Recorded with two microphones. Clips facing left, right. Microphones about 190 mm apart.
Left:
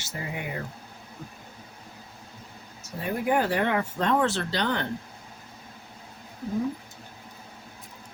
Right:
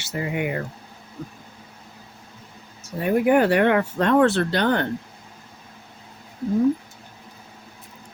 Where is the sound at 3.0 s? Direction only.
65° right (ahead or behind).